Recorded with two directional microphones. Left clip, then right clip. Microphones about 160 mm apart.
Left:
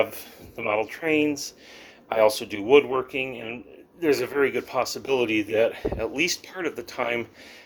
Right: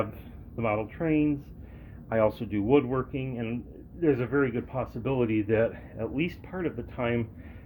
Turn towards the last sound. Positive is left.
turn(degrees=45)  # may be behind; listen again after turning